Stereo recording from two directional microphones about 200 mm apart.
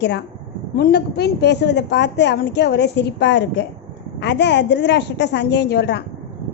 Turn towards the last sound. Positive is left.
turn(degrees=55)  # may be behind; listen again after turning